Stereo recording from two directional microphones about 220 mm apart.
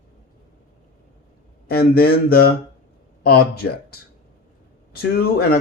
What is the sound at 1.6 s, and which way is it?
Speech, 45° left (ahead or behind).